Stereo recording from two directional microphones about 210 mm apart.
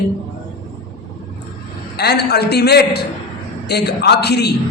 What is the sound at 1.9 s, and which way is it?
A man's voice, 50° left (ahead or behind).